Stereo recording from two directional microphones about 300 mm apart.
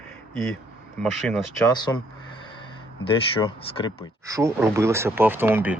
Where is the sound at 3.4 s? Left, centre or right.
Centre.